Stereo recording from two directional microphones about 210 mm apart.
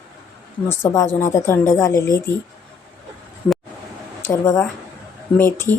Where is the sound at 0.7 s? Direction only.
10° left (ahead or behind).